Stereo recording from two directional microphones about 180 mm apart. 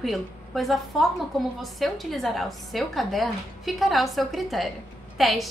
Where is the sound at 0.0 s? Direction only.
Centre (ahead or behind).